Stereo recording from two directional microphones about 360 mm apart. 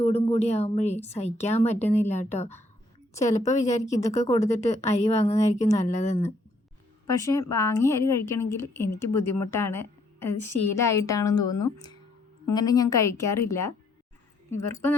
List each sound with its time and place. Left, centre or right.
0.0 s a woman's voice: centre